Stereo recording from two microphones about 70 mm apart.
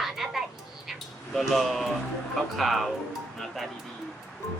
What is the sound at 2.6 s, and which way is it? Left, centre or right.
Speech, centre.